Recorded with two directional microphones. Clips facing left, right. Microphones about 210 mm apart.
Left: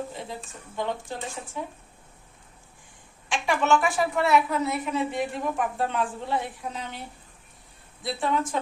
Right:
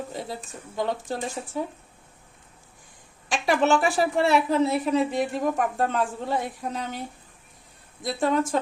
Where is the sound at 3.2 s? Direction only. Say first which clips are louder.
Right 2 dB; 40° right (ahead or behind).